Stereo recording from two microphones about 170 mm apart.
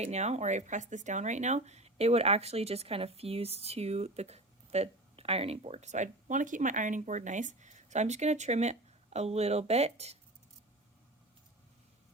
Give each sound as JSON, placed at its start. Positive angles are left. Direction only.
{"t": 0.0, "sound": "speech", "side_deg": -40}